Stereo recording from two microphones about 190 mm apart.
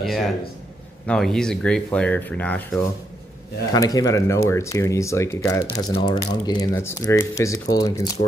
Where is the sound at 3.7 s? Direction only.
20° left (ahead or behind).